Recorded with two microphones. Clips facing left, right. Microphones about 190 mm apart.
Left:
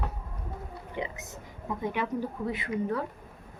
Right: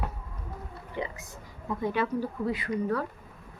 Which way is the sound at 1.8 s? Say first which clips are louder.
Right 2 dB; 20° left (ahead or behind).